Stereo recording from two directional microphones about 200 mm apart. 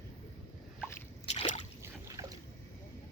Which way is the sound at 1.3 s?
35° left (ahead or behind).